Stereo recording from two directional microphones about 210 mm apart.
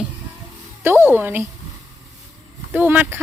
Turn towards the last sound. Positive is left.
turn(degrees=-10)  # may be behind; listen again after turning